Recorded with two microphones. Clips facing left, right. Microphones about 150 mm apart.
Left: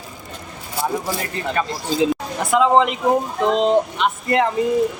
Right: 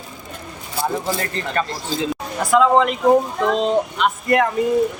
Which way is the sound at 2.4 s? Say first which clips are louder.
Right 1 dB; 20° left (ahead or behind).